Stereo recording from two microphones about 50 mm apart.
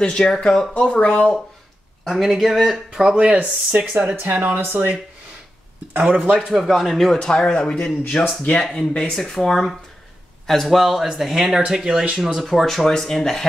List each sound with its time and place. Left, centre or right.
0.0 s speech: centre
0.7 s speech: left
2.0 s speech: centre
3.2 s speech: right
3.7 s speech: right
5.9 s speech: right
6.5 s speech: centre
8.4 s speech: left
8.7 s speech: centre
12.4 s speech: centre